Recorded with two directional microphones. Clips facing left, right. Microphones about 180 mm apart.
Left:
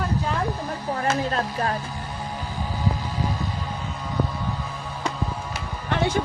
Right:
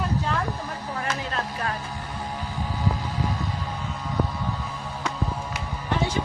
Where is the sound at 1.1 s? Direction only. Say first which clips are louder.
Left 5 dB; 35° left (ahead or behind).